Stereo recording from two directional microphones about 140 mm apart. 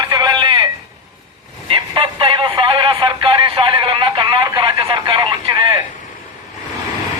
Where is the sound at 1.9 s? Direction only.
35° right (ahead or behind).